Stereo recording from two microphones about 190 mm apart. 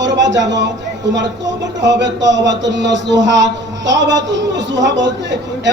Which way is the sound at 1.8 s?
70° right (ahead or behind).